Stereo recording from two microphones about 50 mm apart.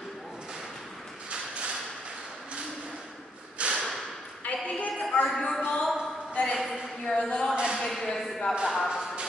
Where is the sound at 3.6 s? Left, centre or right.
Right.